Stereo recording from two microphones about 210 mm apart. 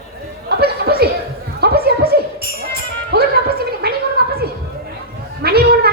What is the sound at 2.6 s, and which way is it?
Music, 50° right (ahead or behind).